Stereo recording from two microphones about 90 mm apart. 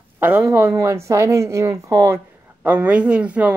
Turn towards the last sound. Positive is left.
turn(degrees=-15)  # may be behind; listen again after turning